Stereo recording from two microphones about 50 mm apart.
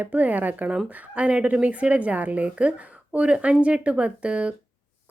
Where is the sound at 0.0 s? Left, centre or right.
Right.